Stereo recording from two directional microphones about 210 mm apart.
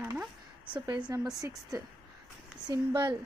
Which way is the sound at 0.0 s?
10° right (ahead or behind).